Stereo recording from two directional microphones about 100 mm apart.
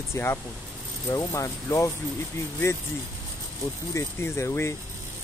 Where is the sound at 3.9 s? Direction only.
30° left (ahead or behind).